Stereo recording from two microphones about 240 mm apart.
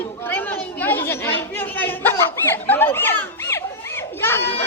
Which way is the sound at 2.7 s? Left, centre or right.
Centre.